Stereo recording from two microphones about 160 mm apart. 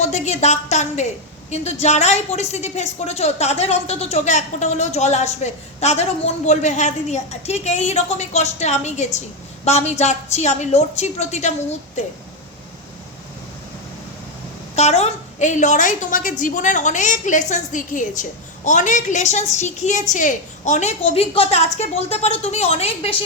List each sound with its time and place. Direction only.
0.0 s a woman's voice: 45° left (ahead or behind)
14.8 s a woman's voice: 40° left (ahead or behind)